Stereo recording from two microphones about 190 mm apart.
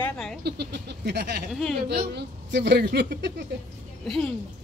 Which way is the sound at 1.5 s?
Centre (ahead or behind).